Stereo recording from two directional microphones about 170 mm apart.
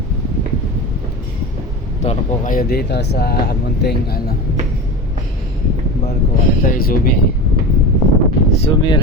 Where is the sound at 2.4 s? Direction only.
60° left (ahead or behind).